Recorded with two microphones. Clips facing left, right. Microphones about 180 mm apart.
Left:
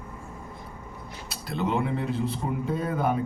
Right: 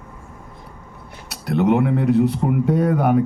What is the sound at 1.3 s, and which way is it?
Speech, 70° right (ahead or behind).